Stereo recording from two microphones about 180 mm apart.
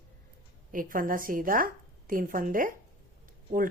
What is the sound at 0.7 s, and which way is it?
A woman's voice, 50° right (ahead or behind).